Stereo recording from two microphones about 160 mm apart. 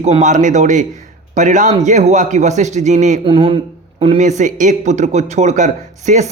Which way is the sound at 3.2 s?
35° right (ahead or behind).